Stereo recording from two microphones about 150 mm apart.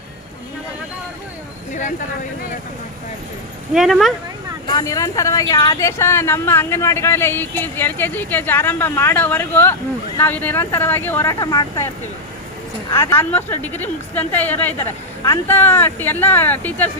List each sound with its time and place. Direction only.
3.8 s speech: centre (ahead or behind)
4.7 s speech: 25° left (ahead or behind)
12.9 s speech: 20° left (ahead or behind)